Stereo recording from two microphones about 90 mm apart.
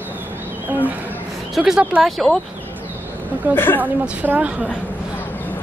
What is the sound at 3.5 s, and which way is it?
Speech, 25° left (ahead or behind).